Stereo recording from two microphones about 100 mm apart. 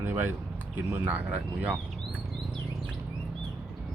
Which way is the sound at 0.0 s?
20° right (ahead or behind).